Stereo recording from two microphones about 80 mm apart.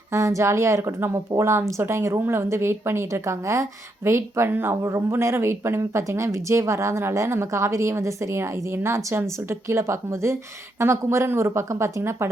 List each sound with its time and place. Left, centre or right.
0.1 s a woman's voice: right